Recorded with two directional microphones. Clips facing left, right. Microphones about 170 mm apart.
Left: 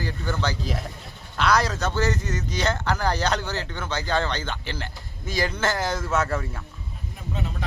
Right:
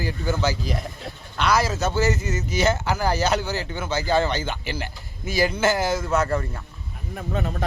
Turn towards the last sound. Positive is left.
turn(degrees=-50)  # may be behind; listen again after turning